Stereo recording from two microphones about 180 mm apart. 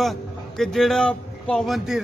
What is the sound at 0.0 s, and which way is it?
A man's voice, centre (ahead or behind).